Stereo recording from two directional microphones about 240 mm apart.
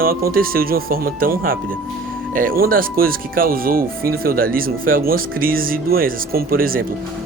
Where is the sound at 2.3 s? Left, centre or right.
Right.